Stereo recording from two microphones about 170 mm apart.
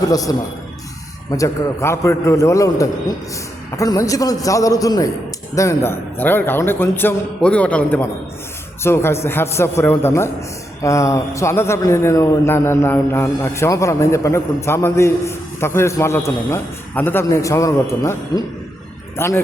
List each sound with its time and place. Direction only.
0.1 s a man's voice: 20° left (ahead or behind)